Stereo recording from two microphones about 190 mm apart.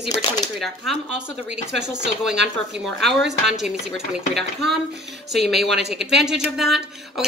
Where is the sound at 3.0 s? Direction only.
Centre (ahead or behind).